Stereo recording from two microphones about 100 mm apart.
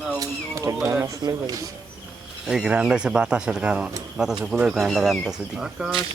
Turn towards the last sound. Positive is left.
turn(degrees=-10)  # may be behind; listen again after turning